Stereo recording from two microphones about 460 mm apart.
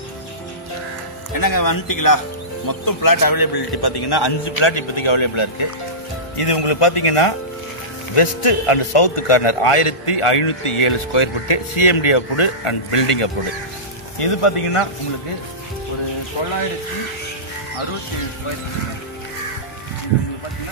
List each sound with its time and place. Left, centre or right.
1.3 s a man's voice: left